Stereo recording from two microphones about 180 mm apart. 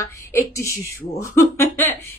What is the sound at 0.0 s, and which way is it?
A woman's voice, 15° left (ahead or behind).